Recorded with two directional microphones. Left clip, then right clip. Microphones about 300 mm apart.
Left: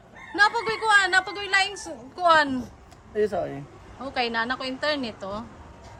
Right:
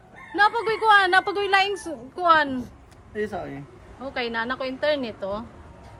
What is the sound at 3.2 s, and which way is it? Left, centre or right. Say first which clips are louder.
Speech: left 4 dB; centre.